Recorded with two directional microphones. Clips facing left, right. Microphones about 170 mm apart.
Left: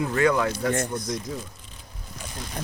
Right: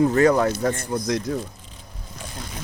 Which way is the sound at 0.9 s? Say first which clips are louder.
Right 6 dB; 90° right.